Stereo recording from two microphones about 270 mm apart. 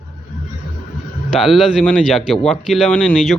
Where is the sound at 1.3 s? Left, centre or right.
Centre.